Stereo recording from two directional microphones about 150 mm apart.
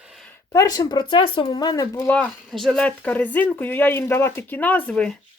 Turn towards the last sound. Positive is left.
turn(degrees=5)  # may be behind; listen again after turning